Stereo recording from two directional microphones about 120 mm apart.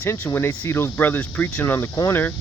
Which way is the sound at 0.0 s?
15° left (ahead or behind).